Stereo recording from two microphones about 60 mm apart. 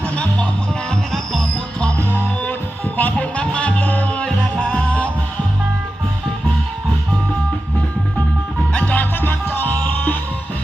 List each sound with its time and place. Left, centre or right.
0.9 s music: centre
3.0 s music: left
8.7 s music: left